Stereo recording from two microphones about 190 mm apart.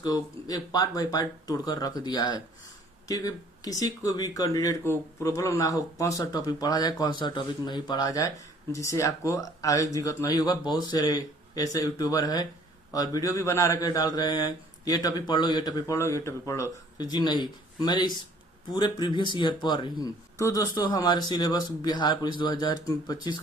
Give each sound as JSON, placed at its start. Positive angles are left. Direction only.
{"t": 0.0, "sound": "speech", "side_deg": 20}